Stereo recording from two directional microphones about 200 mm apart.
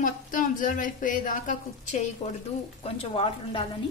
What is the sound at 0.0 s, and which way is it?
A woman's voice, 40° left (ahead or behind).